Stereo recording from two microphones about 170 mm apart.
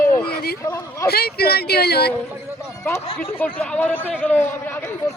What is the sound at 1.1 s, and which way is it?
Speech, 70° left (ahead or behind).